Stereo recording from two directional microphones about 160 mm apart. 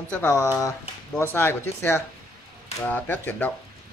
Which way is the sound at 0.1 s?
15° left (ahead or behind).